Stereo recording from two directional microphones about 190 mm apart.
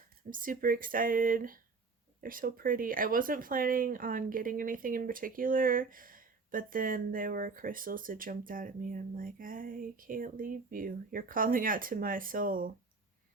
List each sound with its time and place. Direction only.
0.3 s speech: 45° right (ahead or behind)